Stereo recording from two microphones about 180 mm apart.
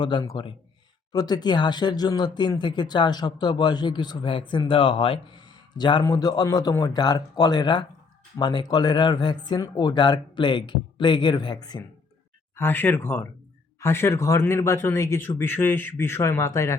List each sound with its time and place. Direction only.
0.0 s speech: 25° left (ahead or behind)
12.5 s speech: 10° left (ahead or behind)